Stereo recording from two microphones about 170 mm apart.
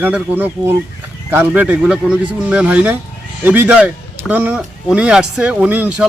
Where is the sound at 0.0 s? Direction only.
10° right (ahead or behind).